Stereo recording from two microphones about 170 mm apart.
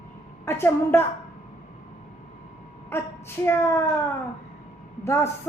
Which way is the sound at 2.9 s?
15° left (ahead or behind).